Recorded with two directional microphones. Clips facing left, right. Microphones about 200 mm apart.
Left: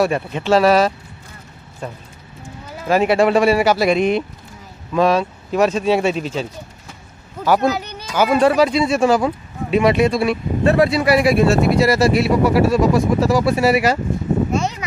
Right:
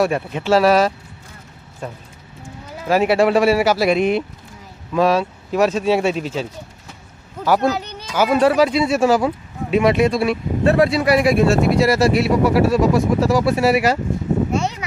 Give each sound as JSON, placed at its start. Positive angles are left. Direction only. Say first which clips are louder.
{"t": 0.0, "sound": "speech", "louder": "left 1 dB", "side_deg": -5}
{"t": 7.4, "sound": "speech", "louder": "left 1 dB", "side_deg": 0}
{"t": 8.1, "sound": "speech", "louder": "left 1 dB", "side_deg": -5}
{"t": 14.5, "sound": "a sound", "louder": "left 1 dB", "side_deg": -10}